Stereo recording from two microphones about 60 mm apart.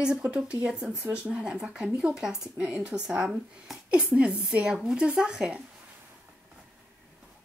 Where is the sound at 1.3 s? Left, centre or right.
Centre.